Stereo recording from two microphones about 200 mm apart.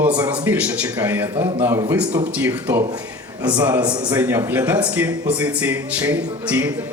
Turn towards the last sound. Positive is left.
turn(degrees=-10)  # may be behind; listen again after turning